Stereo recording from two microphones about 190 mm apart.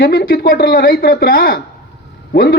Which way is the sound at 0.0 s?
50° left (ahead or behind).